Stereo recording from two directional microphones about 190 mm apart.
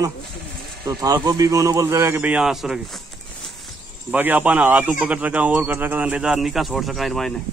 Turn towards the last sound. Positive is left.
turn(degrees=0)  # may be behind; listen again after turning